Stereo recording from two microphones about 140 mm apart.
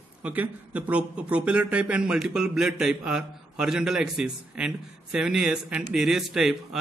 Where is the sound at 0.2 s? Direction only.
10° right (ahead or behind).